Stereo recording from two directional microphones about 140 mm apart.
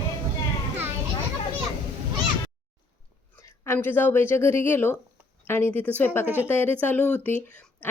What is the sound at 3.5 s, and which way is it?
A woman's voice, 15° left (ahead or behind).